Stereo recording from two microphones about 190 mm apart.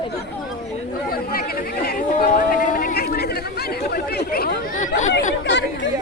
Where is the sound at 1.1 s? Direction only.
50° left (ahead or behind).